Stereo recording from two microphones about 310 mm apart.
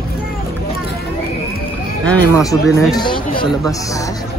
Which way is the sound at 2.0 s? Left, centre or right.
Centre.